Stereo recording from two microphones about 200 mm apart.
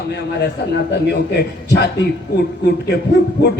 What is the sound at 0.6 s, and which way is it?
A man's voice, 60° left (ahead or behind).